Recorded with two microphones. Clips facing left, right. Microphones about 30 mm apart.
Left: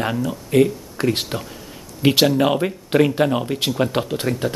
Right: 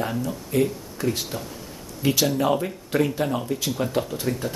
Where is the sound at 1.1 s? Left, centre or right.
Left.